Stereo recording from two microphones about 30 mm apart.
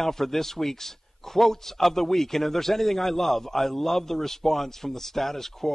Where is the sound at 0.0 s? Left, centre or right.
Centre.